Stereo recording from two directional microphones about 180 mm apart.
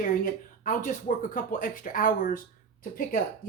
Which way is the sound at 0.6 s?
45° left (ahead or behind).